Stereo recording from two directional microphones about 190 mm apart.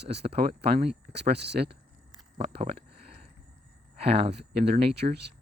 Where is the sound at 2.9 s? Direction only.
55° right (ahead or behind).